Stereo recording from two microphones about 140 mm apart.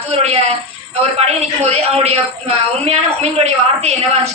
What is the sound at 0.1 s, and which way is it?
A man's voice, 50° right (ahead or behind).